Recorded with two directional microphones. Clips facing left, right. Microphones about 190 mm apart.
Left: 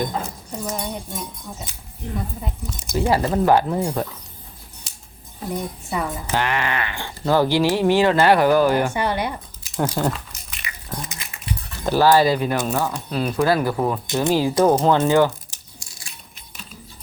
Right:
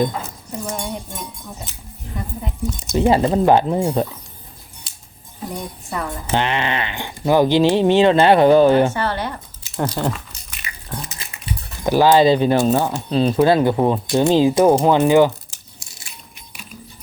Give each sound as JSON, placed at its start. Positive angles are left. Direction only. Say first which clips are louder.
{"t": 0.6, "sound": "speech", "louder": "right 1 dB", "side_deg": 5}
{"t": 2.9, "sound": "speech", "louder": "right 4 dB", "side_deg": -20}
{"t": 5.9, "sound": "speech", "louder": "left 1 dB", "side_deg": 5}
{"t": 6.2, "sound": "speech", "louder": "right 5 dB", "side_deg": -25}
{"t": 8.9, "sound": "speech", "louder": "even", "side_deg": 15}
{"t": 10.8, "sound": "a sound", "louder": "right 1 dB", "side_deg": 0}
{"t": 11.8, "sound": "speech", "louder": "right 3 dB", "side_deg": -15}
{"t": 14.6, "sound": "speech", "louder": "right 3 dB", "side_deg": -10}